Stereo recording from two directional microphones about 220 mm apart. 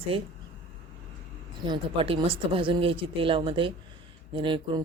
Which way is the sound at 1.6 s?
20° right (ahead or behind).